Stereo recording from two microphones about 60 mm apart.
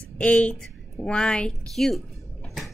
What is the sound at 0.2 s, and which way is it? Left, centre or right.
A woman's voice, centre.